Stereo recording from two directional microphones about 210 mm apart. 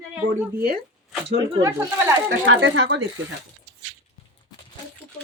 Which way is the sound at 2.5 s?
60° right (ahead or behind).